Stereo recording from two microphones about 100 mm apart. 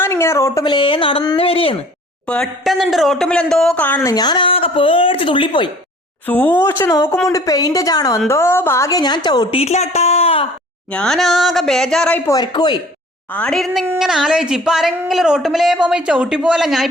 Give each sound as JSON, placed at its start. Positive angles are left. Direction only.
{"t": 0.0, "sound": "speech", "side_deg": 25}
{"t": 0.6, "sound": "speech", "side_deg": 55}
{"t": 2.2, "sound": "a woman's voice", "side_deg": 10}
{"t": 2.6, "sound": "speech", "side_deg": 0}
{"t": 4.0, "sound": "speech", "side_deg": 40}
{"t": 4.4, "sound": "speech", "side_deg": 65}
{"t": 6.2, "sound": "a woman's voice", "side_deg": 20}
{"t": 8.3, "sound": "a woman's voice", "side_deg": 25}
{"t": 9.5, "sound": "a woman's voice", "side_deg": 85}
{"t": 10.9, "sound": "speech", "side_deg": 5}
{"t": 12.3, "sound": "speech", "side_deg": 45}
{"t": 13.3, "sound": "speech", "side_deg": 10}